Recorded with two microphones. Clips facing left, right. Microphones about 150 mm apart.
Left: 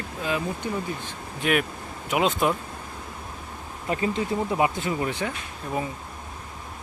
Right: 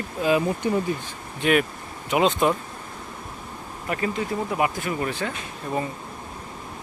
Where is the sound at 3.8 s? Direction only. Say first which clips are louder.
Left 1 dB; 25° left (ahead or behind).